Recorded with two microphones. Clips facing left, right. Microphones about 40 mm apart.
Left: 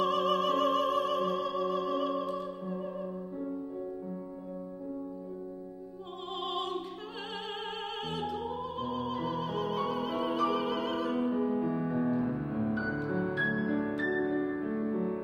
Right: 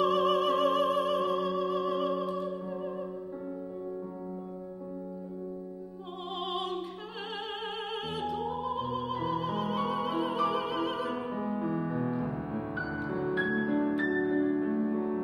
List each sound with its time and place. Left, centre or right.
0.0 s music: centre
6.4 s opera: centre
8.1 s music: centre
11.2 s music: centre
13.5 s music: centre
13.9 s music: centre